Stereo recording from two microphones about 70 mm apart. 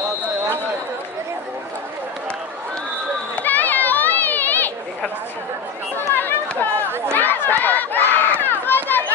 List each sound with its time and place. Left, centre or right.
3.4 s children playing: left
5.9 s run: left
7.2 s crowd: left